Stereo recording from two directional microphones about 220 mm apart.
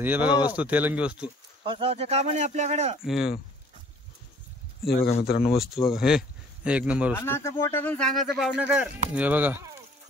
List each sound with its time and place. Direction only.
0.0 s speech: 5° right (ahead or behind)
1.7 s speech: 25° right (ahead or behind)
3.0 s speech: centre (ahead or behind)
5.2 s speech: 45° left (ahead or behind)
5.5 s speech: centre (ahead or behind)
7.2 s speech: 10° left (ahead or behind); by 9.6 s 10° right (ahead or behind)